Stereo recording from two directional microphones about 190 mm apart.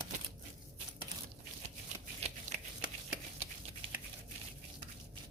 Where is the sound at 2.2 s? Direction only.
35° right (ahead or behind).